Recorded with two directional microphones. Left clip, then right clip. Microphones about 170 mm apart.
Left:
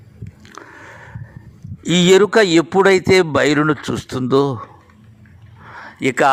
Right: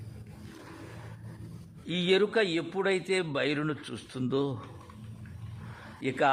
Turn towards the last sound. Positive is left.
turn(degrees=50)  # may be behind; listen again after turning